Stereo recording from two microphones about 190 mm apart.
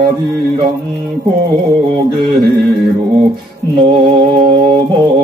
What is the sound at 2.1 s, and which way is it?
Music, 55° right (ahead or behind).